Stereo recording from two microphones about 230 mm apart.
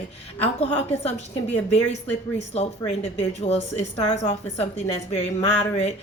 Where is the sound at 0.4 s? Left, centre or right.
Left.